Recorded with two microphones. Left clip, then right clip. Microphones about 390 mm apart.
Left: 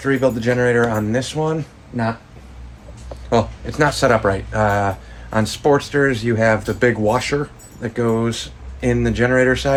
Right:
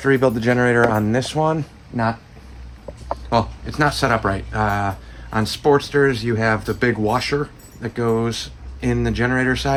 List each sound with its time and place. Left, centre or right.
0.0 s speech: centre
3.2 s speech: centre